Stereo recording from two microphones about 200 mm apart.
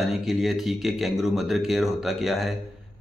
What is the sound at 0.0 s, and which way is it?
A man's voice, centre (ahead or behind).